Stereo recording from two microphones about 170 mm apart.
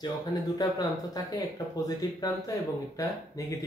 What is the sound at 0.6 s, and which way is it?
Speech, 20° left (ahead or behind).